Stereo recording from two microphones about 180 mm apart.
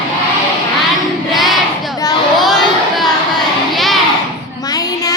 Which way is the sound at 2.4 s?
Centre (ahead or behind).